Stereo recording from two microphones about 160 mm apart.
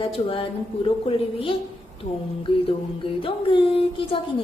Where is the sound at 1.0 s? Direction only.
35° left (ahead or behind).